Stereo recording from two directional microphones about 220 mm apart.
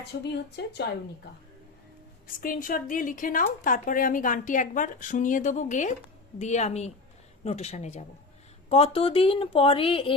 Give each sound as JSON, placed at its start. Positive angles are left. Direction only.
{"t": 0.1, "sound": "speech", "side_deg": 50}
{"t": 2.2, "sound": "speech", "side_deg": 40}